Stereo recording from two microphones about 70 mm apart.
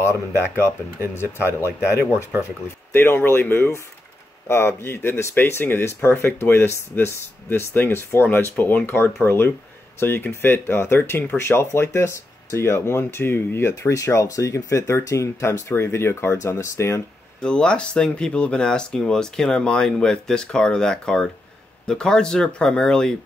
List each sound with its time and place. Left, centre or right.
0.0 s speech: left
17.4 s speech: centre